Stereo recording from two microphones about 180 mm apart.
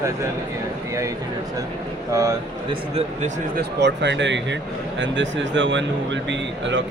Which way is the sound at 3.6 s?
70° right (ahead or behind).